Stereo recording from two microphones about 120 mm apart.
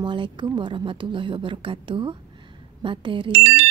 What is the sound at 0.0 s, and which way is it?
Speech, 40° right (ahead or behind).